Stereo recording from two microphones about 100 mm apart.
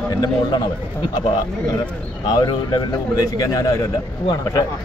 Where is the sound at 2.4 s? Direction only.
40° left (ahead or behind).